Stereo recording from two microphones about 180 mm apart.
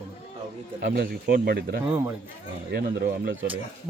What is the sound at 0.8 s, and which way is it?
Speech, 70° right (ahead or behind).